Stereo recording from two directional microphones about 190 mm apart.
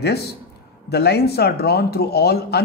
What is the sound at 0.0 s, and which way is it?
Speech, 60° left (ahead or behind).